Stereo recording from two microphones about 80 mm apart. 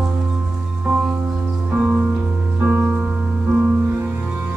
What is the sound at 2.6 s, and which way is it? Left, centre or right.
Music, right.